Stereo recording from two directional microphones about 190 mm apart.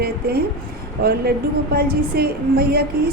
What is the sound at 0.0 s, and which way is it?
A woman's voice, 55° right (ahead or behind).